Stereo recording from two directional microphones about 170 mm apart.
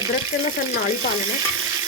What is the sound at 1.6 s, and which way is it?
Frying, 15° right (ahead or behind).